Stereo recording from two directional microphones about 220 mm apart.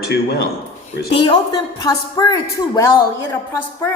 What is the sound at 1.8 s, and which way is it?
Speech, 15° left (ahead or behind).